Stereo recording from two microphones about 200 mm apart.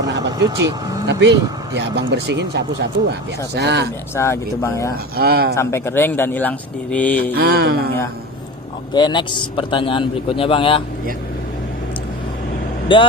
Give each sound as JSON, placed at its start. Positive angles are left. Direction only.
{"t": 0.3, "sound": "speech", "side_deg": -20}
{"t": 1.0, "sound": "speech", "side_deg": -60}
{"t": 4.1, "sound": "speech", "side_deg": 15}
{"t": 5.1, "sound": "a sound", "side_deg": -50}
{"t": 5.5, "sound": "speech", "side_deg": 10}
{"t": 7.3, "sound": "a sound", "side_deg": -50}
{"t": 8.9, "sound": "a man's voice", "side_deg": 20}
{"t": 12.9, "sound": "a man's voice", "side_deg": 25}